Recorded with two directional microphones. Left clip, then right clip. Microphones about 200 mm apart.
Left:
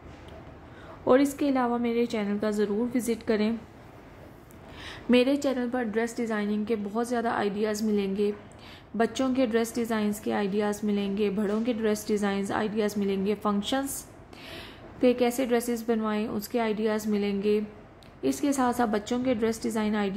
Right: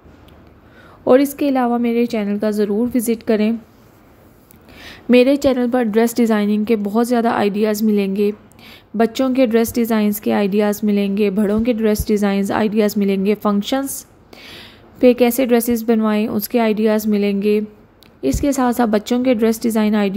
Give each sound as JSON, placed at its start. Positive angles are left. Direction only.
{"t": 1.0, "sound": "a woman's voice", "side_deg": -30}
{"t": 4.7, "sound": "a woman's voice", "side_deg": -25}